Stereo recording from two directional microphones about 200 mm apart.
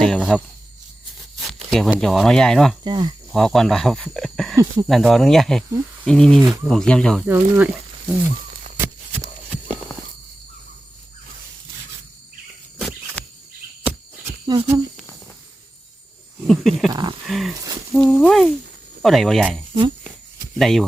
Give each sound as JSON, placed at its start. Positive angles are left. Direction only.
{"t": 0.0, "sound": "speech", "side_deg": 0}
{"t": 1.7, "sound": "speech", "side_deg": 0}
{"t": 2.8, "sound": "speech", "side_deg": -20}
{"t": 3.3, "sound": "speech", "side_deg": 0}
{"t": 4.5, "sound": "speech", "side_deg": -15}
{"t": 4.9, "sound": "speech", "side_deg": 0}
{"t": 7.3, "sound": "speech", "side_deg": -10}
{"t": 8.8, "sound": "a sound", "side_deg": -10}
{"t": 13.2, "sound": "cricket", "side_deg": 5}
{"t": 14.4, "sound": "speech", "side_deg": -20}
{"t": 16.5, "sound": "speech", "side_deg": 0}
{"t": 16.9, "sound": "speech", "side_deg": -20}
{"t": 17.2, "sound": "wild animals", "side_deg": 0}
{"t": 17.9, "sound": "speech", "side_deg": 0}